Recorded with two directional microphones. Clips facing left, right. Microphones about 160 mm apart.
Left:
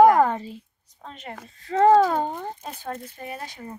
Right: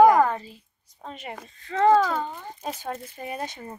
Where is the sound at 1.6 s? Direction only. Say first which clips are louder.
Left 3 dB; 35° left (ahead or behind).